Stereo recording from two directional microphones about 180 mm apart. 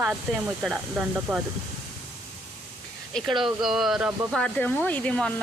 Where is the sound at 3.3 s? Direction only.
Centre (ahead or behind).